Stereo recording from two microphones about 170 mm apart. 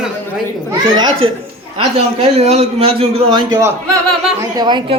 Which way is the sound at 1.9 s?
35° right (ahead or behind).